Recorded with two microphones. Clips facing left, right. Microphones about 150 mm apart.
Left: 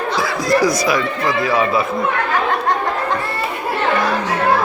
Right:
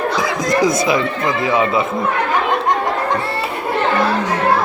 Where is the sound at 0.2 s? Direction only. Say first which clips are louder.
Left 2 dB; 20° right (ahead or behind).